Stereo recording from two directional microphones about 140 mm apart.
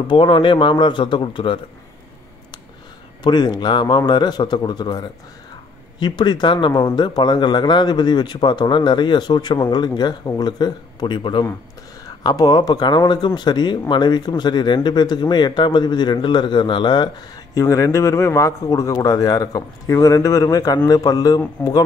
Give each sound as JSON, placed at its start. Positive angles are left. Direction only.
{"t": 0.1, "sound": "speech", "side_deg": 40}
{"t": 3.3, "sound": "speech", "side_deg": 30}